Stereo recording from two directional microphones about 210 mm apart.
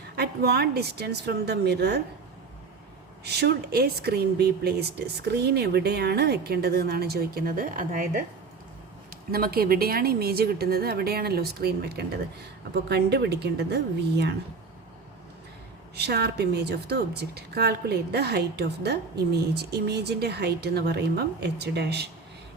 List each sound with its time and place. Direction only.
0.2 s a woman's voice: 50° right (ahead or behind)
3.2 s a woman's voice: 50° right (ahead or behind)
9.3 s a woman's voice: 45° right (ahead or behind)
16.0 s a woman's voice: 50° right (ahead or behind)